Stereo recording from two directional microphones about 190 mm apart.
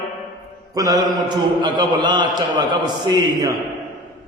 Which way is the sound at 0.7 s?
20° right (ahead or behind).